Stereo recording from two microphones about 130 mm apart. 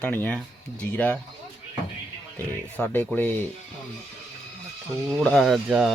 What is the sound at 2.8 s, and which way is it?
Speech, 10° left (ahead or behind).